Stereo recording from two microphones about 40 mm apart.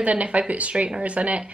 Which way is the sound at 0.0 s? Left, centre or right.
Right.